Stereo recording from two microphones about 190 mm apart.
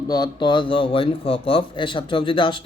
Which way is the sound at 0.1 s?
20° left (ahead or behind).